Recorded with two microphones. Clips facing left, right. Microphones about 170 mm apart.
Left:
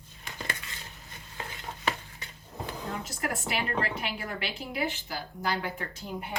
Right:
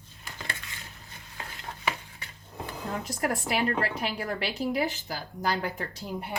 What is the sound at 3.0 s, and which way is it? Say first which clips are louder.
A woman's voice: right 4 dB; 45° right (ahead or behind).